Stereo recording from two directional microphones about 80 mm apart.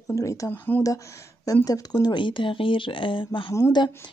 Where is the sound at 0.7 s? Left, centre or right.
Left.